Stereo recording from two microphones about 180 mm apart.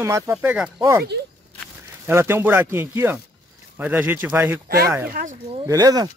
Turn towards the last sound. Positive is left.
turn(degrees=-20)  # may be behind; listen again after turning